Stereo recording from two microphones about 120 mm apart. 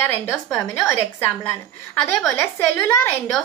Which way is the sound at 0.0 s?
20° left (ahead or behind).